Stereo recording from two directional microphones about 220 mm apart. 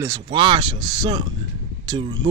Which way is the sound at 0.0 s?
20° right (ahead or behind).